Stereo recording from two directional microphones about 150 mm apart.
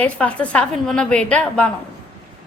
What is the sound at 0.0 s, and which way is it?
A woman's voice, 10° left (ahead or behind).